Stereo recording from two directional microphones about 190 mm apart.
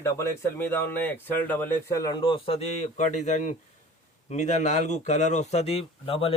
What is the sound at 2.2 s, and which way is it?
A man's voice, 30° left (ahead or behind).